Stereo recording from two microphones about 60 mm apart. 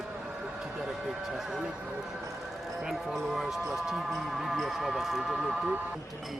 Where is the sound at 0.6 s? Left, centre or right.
Centre.